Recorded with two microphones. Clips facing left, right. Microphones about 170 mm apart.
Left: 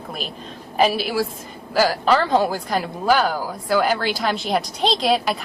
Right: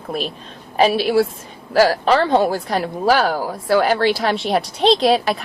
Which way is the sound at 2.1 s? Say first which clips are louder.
Even; 25° right (ahead or behind).